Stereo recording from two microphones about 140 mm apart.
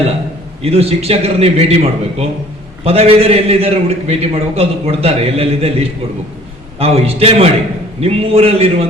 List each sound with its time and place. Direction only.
0.6 s a man's voice: 45° right (ahead or behind)